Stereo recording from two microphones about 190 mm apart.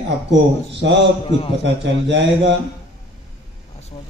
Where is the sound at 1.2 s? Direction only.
30° left (ahead or behind).